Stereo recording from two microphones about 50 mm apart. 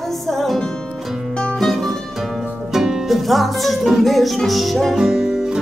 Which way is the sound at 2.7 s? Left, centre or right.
Centre.